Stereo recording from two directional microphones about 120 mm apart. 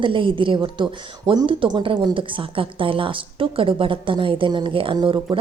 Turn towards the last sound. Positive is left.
turn(degrees=-45)  # may be behind; listen again after turning